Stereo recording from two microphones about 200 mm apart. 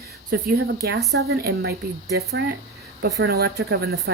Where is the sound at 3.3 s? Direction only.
55° right (ahead or behind).